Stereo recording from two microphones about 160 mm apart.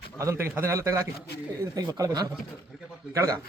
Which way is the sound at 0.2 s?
15° right (ahead or behind).